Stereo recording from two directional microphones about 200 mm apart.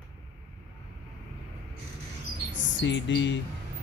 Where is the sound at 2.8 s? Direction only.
65° left (ahead or behind).